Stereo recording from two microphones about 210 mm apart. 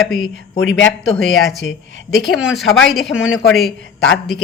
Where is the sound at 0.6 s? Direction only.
65° left (ahead or behind).